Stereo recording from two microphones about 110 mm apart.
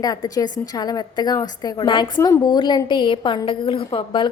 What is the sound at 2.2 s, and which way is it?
A woman's voice, 30° left (ahead or behind).